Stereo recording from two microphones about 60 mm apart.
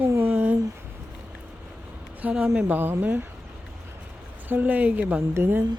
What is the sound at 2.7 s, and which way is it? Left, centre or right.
Speech, right.